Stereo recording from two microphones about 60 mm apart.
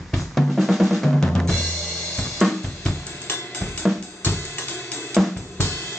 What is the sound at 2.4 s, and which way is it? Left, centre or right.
Drum kit, centre.